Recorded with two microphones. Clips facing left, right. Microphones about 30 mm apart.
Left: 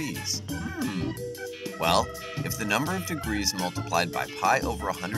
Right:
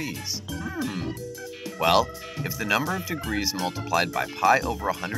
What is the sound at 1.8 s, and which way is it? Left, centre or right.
Speech, centre.